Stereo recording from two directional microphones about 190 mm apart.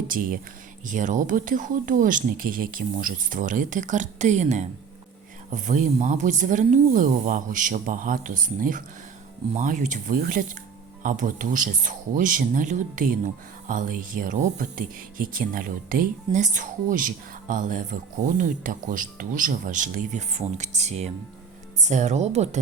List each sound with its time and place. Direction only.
0.9 s speech: 40° right (ahead or behind)